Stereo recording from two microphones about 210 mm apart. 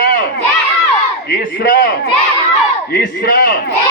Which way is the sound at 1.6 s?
40° left (ahead or behind).